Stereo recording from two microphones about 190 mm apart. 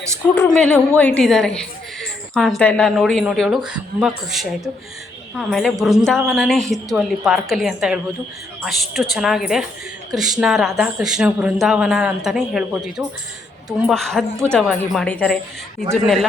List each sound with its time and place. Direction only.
0.3 s a woman's voice: 5° left (ahead or behind)